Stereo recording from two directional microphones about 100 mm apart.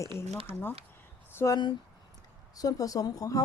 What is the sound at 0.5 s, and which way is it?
A woman's voice, 20° left (ahead or behind).